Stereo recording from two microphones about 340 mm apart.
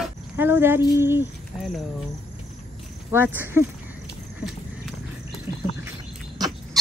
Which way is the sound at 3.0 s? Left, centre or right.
Centre.